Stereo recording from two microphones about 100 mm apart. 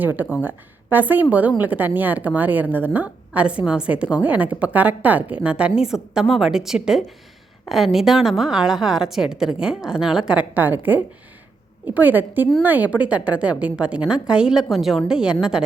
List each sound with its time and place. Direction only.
0.4 s a woman's voice: 20° right (ahead or behind)